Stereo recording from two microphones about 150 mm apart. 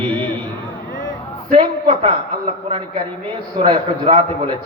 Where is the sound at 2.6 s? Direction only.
35° right (ahead or behind).